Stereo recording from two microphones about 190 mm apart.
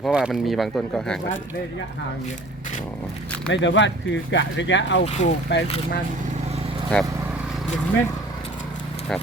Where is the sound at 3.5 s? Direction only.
70° left (ahead or behind).